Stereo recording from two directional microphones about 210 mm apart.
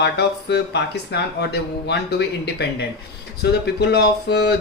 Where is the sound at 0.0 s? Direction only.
50° left (ahead or behind).